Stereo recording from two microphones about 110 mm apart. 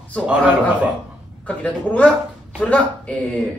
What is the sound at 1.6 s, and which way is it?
A man's voice, 10° left (ahead or behind).